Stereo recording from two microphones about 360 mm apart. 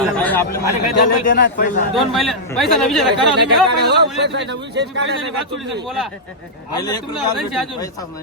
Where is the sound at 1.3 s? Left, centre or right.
Left.